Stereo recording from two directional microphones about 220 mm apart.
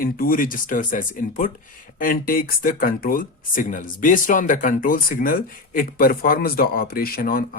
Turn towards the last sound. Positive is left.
turn(degrees=40)  # may be behind; listen again after turning